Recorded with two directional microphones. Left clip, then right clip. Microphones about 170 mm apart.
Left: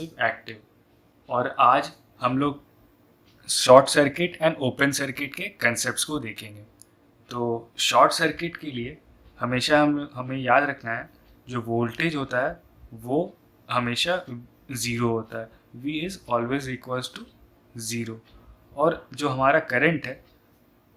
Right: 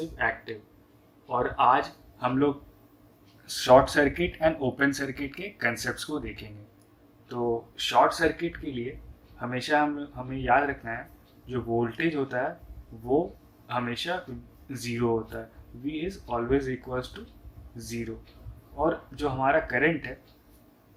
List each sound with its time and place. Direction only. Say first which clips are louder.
0.2 s speech: left 4 dB; 50° left (ahead or behind)
13.7 s speech: left 6 dB; 55° left (ahead or behind)